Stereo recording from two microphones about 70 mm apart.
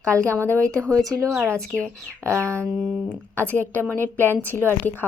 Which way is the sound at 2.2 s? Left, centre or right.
Right.